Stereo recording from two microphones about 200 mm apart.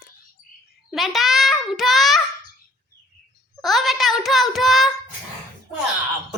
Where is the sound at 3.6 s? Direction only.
Centre (ahead or behind).